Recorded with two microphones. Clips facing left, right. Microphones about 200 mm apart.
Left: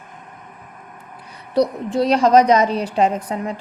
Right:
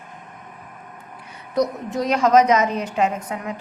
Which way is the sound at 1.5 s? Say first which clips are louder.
Left 4 dB; 30° left (ahead or behind).